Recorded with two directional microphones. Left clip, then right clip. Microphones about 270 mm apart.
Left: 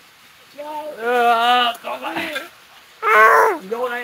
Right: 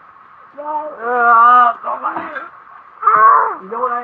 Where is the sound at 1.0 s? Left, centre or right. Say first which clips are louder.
Right 6 dB; left.